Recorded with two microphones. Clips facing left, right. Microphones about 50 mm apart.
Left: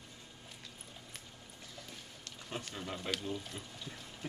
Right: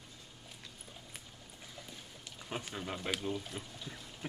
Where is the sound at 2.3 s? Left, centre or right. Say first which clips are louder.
Right 2 dB; centre.